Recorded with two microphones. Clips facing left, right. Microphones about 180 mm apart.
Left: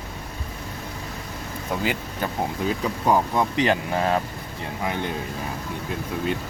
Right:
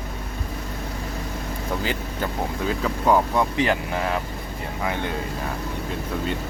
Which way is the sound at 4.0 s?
35° left (ahead or behind).